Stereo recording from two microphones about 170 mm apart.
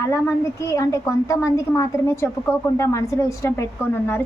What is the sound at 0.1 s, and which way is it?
A woman's voice, 20° left (ahead or behind).